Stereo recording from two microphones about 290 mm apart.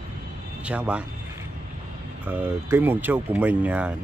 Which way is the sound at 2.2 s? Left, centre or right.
Centre.